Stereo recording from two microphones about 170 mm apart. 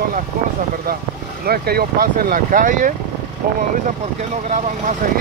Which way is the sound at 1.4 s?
65° right (ahead or behind).